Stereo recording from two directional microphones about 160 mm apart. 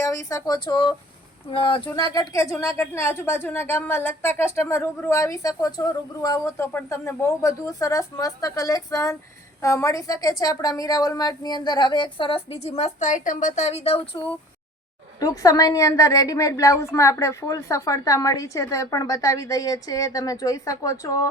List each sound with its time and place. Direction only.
0.0 s a woman's voice: 20° left (ahead or behind)
1.9 s a woman's voice: 20° left (ahead or behind); by 14.1 s 35° left (ahead or behind)
15.2 s a woman's voice: 20° left (ahead or behind)